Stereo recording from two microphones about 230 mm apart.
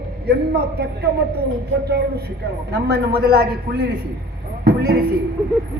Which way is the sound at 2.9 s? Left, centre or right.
Right.